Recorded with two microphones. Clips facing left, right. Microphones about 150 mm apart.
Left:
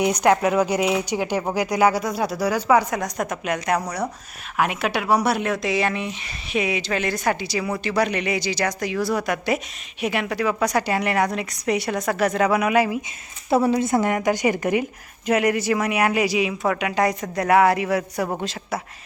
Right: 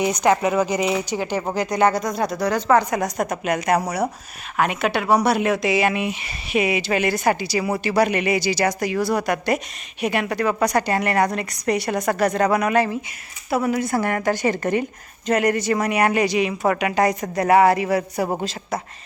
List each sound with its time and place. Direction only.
0.0 s speech: 10° left (ahead or behind)
13.5 s speech: 25° left (ahead or behind); by 18.3 s centre (ahead or behind)